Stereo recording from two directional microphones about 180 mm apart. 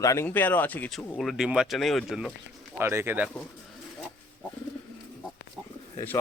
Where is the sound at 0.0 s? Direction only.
15° left (ahead or behind); by 2.3 s 5° right (ahead or behind).